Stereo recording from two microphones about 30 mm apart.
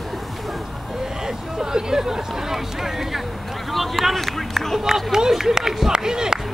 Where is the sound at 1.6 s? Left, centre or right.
Centre.